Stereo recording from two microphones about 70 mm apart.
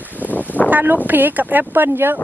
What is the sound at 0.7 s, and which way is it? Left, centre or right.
Speech, right.